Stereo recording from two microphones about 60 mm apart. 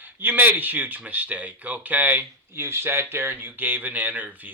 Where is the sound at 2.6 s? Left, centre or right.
Right.